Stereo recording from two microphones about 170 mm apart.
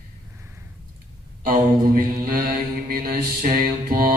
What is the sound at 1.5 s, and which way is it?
Mantra, 55° right (ahead or behind).